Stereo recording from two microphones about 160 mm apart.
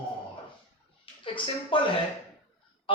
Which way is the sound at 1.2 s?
35° left (ahead or behind).